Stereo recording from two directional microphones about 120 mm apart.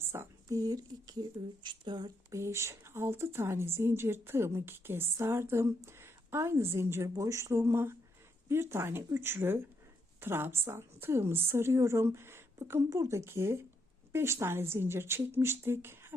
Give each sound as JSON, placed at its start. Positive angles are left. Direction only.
{"t": 0.0, "sound": "speech", "side_deg": -20}
{"t": 2.3, "sound": "a woman's voice", "side_deg": -25}